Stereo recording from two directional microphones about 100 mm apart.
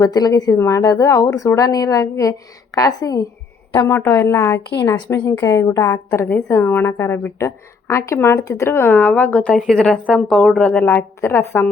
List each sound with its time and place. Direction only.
0.0 s a woman's voice: 40° left (ahead or behind)
0.6 s a woman's voice: 30° left (ahead or behind)
3.8 s a woman's voice: 25° left (ahead or behind)
6.1 s a woman's voice: 15° left (ahead or behind)
10.7 s a woman's voice: 15° left (ahead or behind)